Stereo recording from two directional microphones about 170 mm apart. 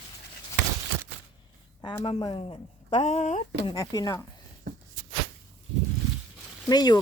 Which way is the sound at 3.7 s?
20° left (ahead or behind).